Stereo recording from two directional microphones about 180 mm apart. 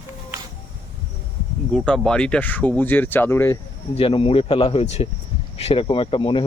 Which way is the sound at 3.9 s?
30° left (ahead or behind).